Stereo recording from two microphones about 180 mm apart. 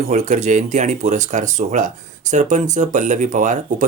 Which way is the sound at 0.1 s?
40° right (ahead or behind).